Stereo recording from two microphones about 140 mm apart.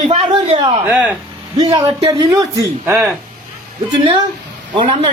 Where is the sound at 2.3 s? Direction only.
25° right (ahead or behind).